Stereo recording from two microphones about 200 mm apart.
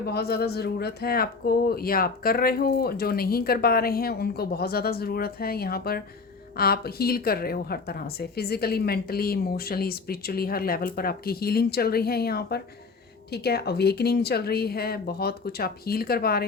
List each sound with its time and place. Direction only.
0.0 s a woman's voice: 50° left (ahead or behind)